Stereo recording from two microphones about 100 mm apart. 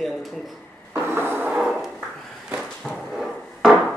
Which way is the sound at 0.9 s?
25° right (ahead or behind).